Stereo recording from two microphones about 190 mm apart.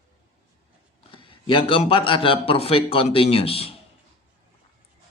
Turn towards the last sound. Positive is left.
turn(degrees=30)  # may be behind; listen again after turning